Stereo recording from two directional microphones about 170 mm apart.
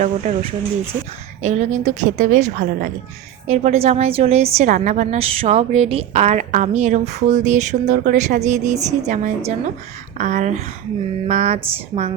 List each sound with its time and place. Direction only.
0.0 s a woman's voice: 45° right (ahead or behind)